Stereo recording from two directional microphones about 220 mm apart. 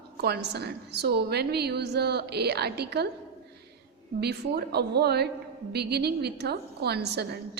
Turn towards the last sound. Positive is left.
turn(degrees=-50)  # may be behind; listen again after turning